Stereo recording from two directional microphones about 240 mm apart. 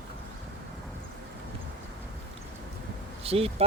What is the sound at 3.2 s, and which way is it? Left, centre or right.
Speech, right.